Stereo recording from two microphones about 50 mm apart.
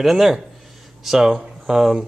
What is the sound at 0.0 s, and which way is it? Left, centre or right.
Speech, centre.